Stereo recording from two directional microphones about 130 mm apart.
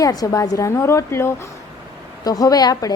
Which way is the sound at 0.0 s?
30° left (ahead or behind).